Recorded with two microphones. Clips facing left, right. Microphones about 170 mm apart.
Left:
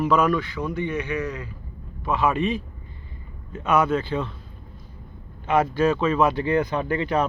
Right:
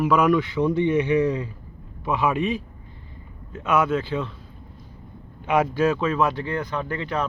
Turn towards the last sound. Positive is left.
turn(degrees=10)  # may be behind; listen again after turning